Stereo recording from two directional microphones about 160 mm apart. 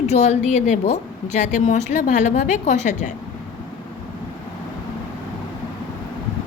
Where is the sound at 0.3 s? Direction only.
45° left (ahead or behind).